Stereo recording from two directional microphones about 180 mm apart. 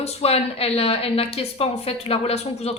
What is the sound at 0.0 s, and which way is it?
A woman's voice, 35° left (ahead or behind).